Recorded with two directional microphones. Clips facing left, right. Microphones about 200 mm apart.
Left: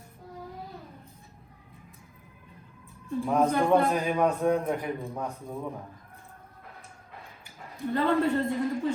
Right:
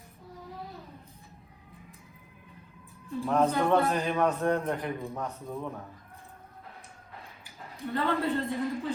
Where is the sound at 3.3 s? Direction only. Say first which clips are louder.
Left 2 dB; 10° left (ahead or behind).